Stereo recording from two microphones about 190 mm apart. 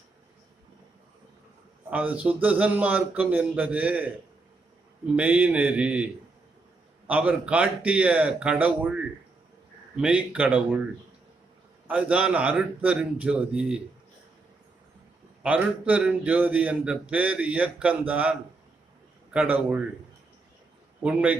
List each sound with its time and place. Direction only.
1.9 s speech: 10° right (ahead or behind)
7.1 s speech: 10° right (ahead or behind)
11.9 s speech: 10° right (ahead or behind)
15.4 s speech: 5° right (ahead or behind)
21.0 s speech: 5° right (ahead or behind)